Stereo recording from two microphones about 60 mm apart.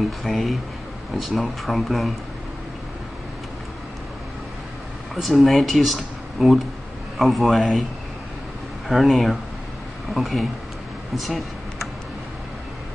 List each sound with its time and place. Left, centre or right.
0.2 s speech: centre
5.1 s speech: centre
8.8 s speech: centre
11.1 s vehicle: centre